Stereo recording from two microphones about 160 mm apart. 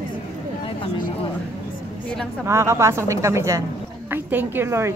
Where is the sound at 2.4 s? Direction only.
15° right (ahead or behind).